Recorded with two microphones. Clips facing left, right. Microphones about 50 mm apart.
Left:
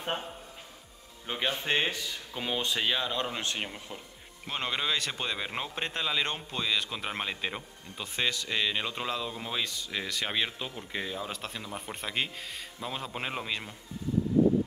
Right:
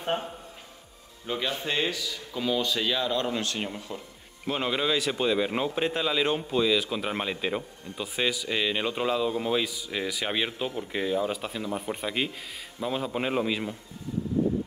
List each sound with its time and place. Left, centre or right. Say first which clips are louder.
1.2 s speech: right 2 dB; left
1.7 s speech: right 1 dB; left; by 4.0 s centre
4.5 s speech: right 5 dB; centre